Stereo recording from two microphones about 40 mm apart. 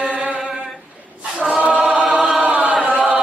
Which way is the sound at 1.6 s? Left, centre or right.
Right.